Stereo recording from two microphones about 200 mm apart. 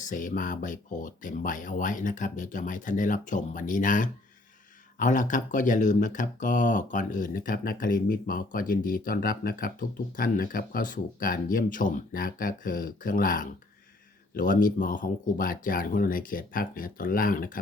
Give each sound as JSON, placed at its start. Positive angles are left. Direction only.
{"t": 0.0, "sound": "speech", "side_deg": 40}